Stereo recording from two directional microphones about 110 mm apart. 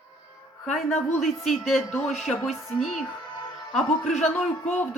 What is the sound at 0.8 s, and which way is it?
Speech, 90° left.